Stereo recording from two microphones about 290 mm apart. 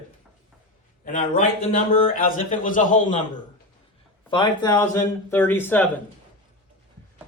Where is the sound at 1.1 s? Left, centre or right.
Left.